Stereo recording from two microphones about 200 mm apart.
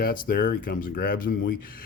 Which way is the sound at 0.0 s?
50° left (ahead or behind).